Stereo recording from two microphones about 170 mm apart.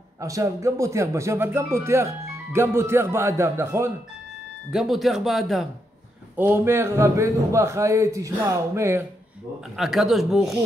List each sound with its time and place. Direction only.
0.2 s a man's voice: 20° right (ahead or behind)
4.7 s speech: centre (ahead or behind)
6.3 s a man's voice: 15° right (ahead or behind)
9.8 s speech: centre (ahead or behind)